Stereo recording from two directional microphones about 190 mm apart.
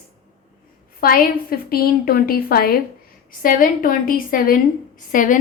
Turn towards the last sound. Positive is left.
turn(degrees=45)  # may be behind; listen again after turning